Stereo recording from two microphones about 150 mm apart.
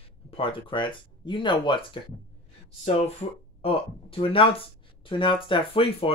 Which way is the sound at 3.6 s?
35° left (ahead or behind).